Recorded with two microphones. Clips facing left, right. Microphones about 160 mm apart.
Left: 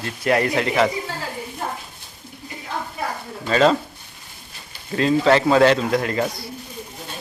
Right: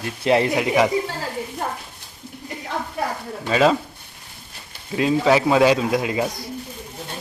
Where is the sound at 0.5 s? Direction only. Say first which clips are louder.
Right 1 dB; 10° right (ahead or behind).